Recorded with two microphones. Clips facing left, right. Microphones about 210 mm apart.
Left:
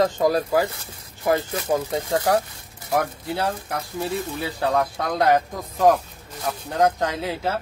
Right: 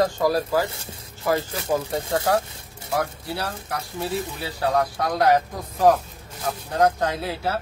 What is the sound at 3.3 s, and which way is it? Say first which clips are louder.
Speech: left 4 dB; 20° left (ahead or behind).